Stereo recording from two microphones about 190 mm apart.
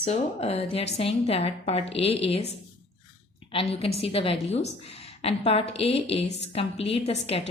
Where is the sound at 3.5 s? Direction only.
30° left (ahead or behind).